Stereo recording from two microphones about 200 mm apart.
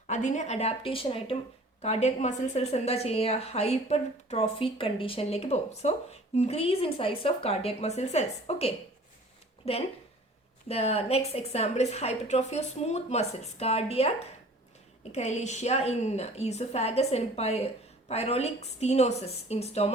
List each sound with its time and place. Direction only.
0.1 s a woman's voice: 35° left (ahead or behind)